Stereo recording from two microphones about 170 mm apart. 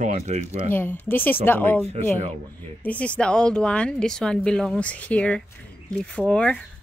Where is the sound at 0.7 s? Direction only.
10° left (ahead or behind).